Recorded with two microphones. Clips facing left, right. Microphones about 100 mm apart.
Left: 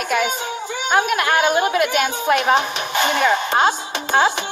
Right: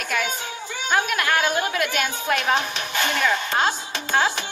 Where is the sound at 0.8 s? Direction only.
20° left (ahead or behind).